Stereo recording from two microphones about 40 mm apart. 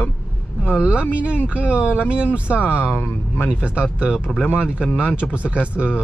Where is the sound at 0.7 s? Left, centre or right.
Right.